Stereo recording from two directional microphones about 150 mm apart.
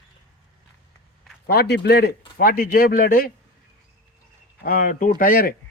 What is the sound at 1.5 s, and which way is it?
Speech, 90° left.